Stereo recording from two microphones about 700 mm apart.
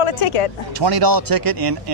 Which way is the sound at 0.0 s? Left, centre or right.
Left.